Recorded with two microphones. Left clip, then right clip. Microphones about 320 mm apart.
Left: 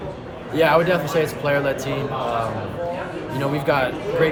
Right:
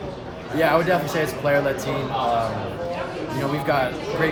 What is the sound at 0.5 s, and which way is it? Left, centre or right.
Speech, centre.